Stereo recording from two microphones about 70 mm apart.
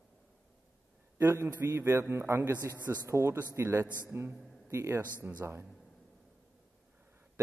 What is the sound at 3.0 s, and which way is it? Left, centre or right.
A man's voice, right.